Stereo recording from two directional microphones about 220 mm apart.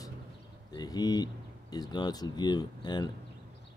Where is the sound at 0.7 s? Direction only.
20° left (ahead or behind).